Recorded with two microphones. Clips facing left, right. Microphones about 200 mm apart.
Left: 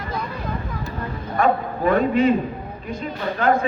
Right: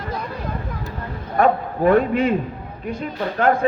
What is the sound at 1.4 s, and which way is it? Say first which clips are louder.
Speech: right 2 dB; 60° right (ahead or behind).